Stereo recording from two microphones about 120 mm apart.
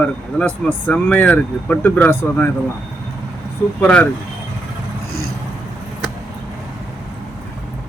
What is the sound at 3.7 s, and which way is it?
Speech, 15° left (ahead or behind).